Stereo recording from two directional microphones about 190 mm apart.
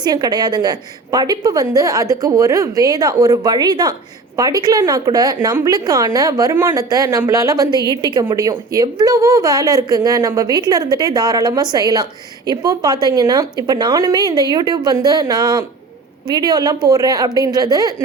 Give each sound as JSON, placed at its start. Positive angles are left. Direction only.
{"t": 0.0, "sound": "a woman's voice", "side_deg": -20}